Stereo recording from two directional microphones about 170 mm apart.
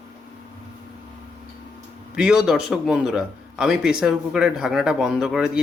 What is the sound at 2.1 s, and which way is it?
A man's voice, 5° right (ahead or behind).